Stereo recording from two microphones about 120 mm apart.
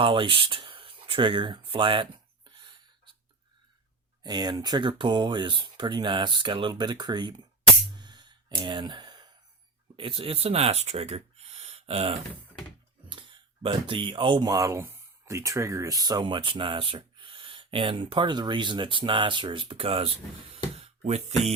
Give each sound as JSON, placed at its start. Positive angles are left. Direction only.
{"t": 0.0, "sound": "speech", "side_deg": -45}
{"t": 4.2, "sound": "speech", "side_deg": -35}
{"t": 7.9, "sound": "music", "side_deg": -40}
{"t": 10.0, "sound": "speech", "side_deg": -50}
{"t": 13.1, "sound": "speech", "side_deg": -45}
{"t": 20.7, "sound": "a sound", "side_deg": -60}